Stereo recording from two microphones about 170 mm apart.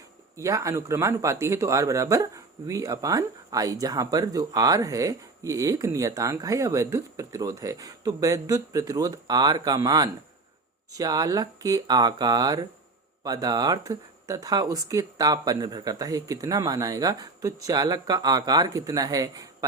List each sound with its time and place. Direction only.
0.3 s speech: 20° right (ahead or behind)